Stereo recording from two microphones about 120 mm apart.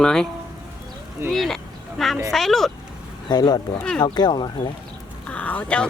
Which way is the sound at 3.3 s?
35° left (ahead or behind).